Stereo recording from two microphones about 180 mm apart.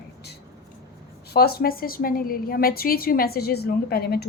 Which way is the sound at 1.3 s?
60° left (ahead or behind).